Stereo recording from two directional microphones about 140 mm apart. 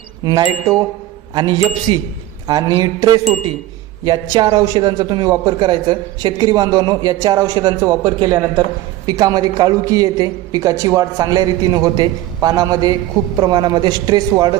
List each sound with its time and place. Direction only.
0.3 s a woman's voice: 30° right (ahead or behind)